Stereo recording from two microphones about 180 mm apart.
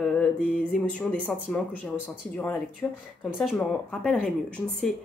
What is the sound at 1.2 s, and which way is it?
A woman's voice, 5° left (ahead or behind).